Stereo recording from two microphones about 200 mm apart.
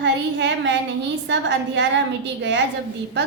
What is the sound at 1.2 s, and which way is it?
Speech, 65° right (ahead or behind).